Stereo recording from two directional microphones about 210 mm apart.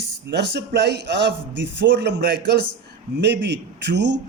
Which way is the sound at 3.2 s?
55° right (ahead or behind).